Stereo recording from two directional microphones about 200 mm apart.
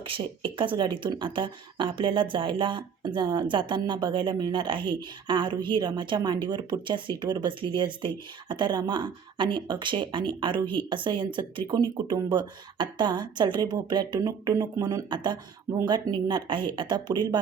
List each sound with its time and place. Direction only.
0.0 s a woman's voice: 25° right (ahead or behind)